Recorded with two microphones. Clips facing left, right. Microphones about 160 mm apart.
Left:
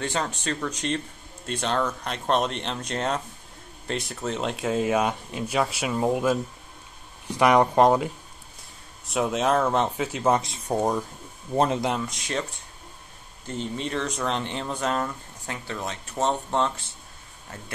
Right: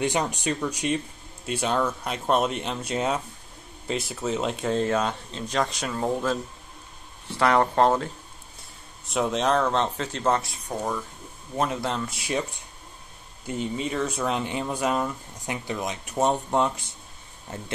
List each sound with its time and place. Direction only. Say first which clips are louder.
0.0 s speech: right 3 dB; 15° right (ahead or behind); by 8.1 s 15° left (ahead or behind)
9.0 s speech: even; centre (ahead or behind)
10.4 s speech: left 5 dB; 25° left (ahead or behind)
10.8 s speech: left 4 dB; 35° left (ahead or behind)
12.0 s speech: right 1 dB; 5° right (ahead or behind)
13.5 s speech: right 2 dB; 5° right (ahead or behind)